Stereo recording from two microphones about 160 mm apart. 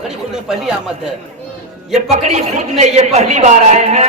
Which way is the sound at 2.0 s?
45° right (ahead or behind).